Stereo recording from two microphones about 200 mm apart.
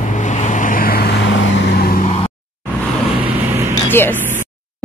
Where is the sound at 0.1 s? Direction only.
35° left (ahead or behind).